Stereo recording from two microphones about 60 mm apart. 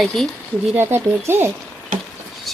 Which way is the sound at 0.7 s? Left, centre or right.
Right.